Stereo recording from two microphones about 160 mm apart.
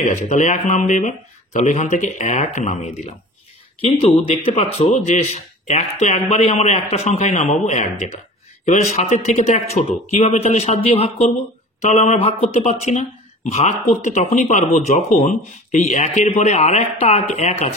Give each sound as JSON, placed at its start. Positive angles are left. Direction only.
{"t": 0.0, "sound": "speech", "side_deg": 45}